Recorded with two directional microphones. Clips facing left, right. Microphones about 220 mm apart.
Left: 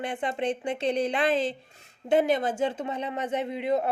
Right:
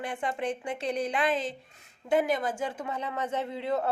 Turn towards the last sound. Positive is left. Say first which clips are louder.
# left 3 dB
turn(degrees=15)  # may be behind; listen again after turning